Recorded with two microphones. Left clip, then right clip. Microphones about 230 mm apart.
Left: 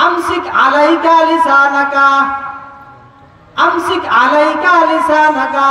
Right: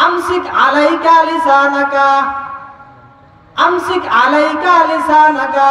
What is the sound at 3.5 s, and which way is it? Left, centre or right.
A woman's voice, right.